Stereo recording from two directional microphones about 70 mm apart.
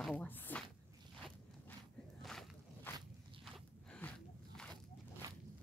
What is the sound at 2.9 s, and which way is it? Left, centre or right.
Walk, left.